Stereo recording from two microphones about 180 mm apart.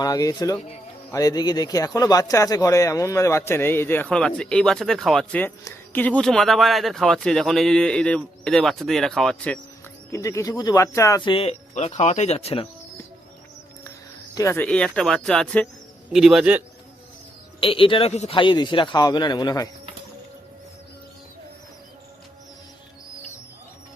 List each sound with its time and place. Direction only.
0.0 s speech: 20° left (ahead or behind)
10.1 s speech: 15° left (ahead or behind); by 12.6 s 35° left (ahead or behind)
14.3 s speech: 15° left (ahead or behind); by 16.6 s 5° right (ahead or behind)
17.6 s speech: 30° left (ahead or behind)